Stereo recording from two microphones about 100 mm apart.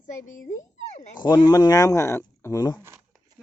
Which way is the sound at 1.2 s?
45° left (ahead or behind).